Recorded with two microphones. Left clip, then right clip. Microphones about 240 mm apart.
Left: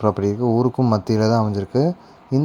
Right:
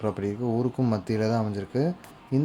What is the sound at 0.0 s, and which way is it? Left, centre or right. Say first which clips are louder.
Speech: left 9 dB; left.